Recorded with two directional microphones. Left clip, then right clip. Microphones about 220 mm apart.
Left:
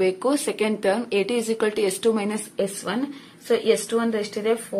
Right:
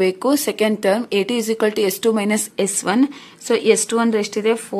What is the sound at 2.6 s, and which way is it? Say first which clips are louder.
A woman's voice: right 6 dB; 45° right (ahead or behind).